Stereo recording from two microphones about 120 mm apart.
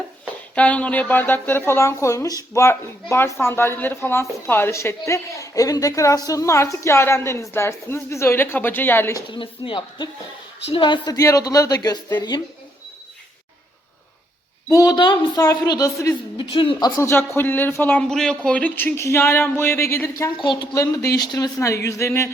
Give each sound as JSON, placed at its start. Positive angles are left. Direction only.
{"t": 0.5, "sound": "a woman's voice", "side_deg": 10}
{"t": 9.3, "sound": "a woman's voice", "side_deg": 45}
{"t": 14.7, "sound": "a woman's voice", "side_deg": 30}
{"t": 14.9, "sound": "a woman's voice", "side_deg": 40}
{"t": 16.4, "sound": "speech", "side_deg": 45}
{"t": 17.0, "sound": "a woman's voice", "side_deg": 20}
{"t": 20.4, "sound": "a woman's voice", "side_deg": 40}
{"t": 20.7, "sound": "a woman's voice", "side_deg": 25}